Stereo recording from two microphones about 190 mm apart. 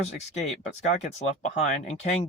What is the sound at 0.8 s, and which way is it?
Speech, 40° left (ahead or behind).